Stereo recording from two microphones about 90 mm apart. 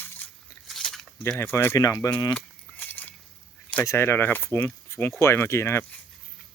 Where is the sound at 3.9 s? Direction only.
30° left (ahead or behind).